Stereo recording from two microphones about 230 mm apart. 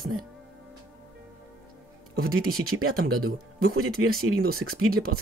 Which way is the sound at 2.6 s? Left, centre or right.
Right.